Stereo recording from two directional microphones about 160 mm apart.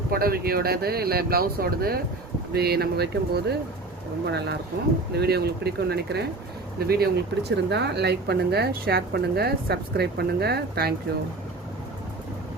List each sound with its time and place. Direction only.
0.1 s speech: 70° right (ahead or behind)
2.5 s speech: 85° right
6.7 s speech: 75° right (ahead or behind)